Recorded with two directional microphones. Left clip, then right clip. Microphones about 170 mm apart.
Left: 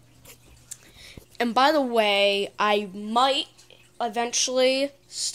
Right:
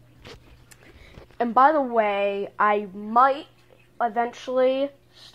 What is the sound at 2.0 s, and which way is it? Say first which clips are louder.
Speech: left 2 dB; 55° left (ahead or behind).